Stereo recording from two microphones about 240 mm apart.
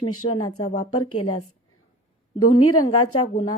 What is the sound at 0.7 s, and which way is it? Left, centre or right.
Speech, left.